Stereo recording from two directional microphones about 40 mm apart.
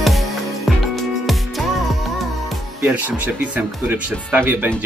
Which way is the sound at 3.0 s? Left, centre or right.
Right.